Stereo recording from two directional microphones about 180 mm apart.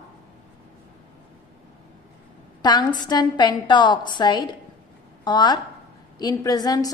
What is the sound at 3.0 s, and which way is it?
A woman's voice, 25° left (ahead or behind).